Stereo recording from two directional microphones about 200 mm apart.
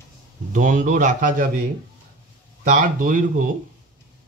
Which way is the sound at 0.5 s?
40° right (ahead or behind).